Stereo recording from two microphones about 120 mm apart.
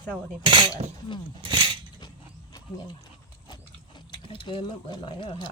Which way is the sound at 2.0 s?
35° left (ahead or behind).